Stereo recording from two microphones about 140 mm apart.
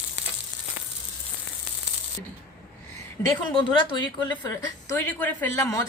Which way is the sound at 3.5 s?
35° left (ahead or behind).